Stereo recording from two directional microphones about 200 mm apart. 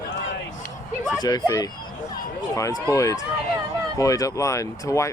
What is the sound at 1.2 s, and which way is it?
Speech, 20° left (ahead or behind).